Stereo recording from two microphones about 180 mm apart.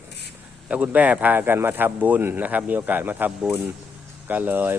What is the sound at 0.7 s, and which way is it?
Speech, 10° right (ahead or behind).